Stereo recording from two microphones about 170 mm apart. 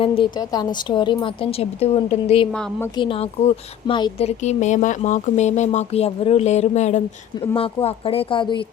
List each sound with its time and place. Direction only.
0.0 s speech: 30° left (ahead or behind)
2.5 s a woman's voice: 5° left (ahead or behind)
2.9 s speech: 30° left (ahead or behind)